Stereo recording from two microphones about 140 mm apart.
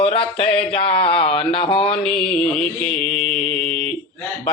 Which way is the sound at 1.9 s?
5° left (ahead or behind).